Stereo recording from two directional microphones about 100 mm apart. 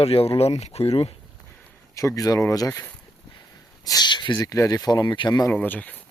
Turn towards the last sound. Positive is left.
turn(degrees=15)  # may be behind; listen again after turning